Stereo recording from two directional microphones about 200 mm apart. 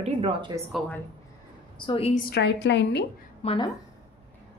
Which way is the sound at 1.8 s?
25° left (ahead or behind).